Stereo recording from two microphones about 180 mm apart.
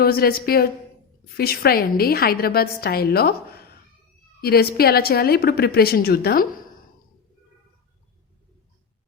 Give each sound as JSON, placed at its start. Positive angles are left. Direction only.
{"t": 0.0, "sound": "a woman's voice", "side_deg": 55}